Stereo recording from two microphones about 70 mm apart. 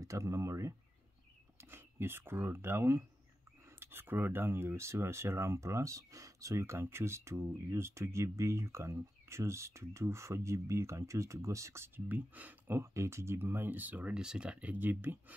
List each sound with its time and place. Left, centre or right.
0.0 s speech: right
1.6 s speech: right
12.1 s speech: right
12.7 s speech: right